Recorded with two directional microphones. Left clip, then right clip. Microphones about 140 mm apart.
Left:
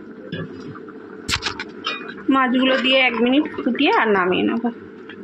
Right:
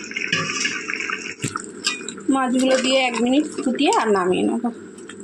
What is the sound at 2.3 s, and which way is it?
Speech, 25° right (ahead or behind).